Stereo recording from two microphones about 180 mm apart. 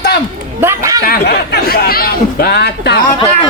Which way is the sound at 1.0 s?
55° left (ahead or behind).